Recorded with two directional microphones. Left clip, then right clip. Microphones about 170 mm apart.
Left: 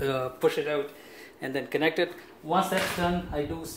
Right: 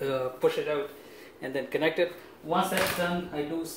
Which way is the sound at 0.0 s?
55° left (ahead or behind).